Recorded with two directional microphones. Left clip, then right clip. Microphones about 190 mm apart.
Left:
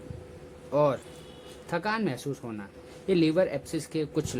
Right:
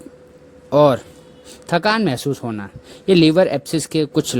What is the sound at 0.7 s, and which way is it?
Speech, 40° right (ahead or behind).